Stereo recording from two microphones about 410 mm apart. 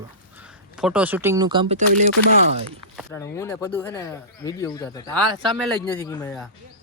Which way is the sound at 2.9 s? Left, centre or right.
Centre.